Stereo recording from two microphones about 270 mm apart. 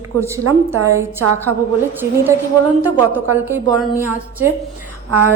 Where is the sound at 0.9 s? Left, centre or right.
Centre.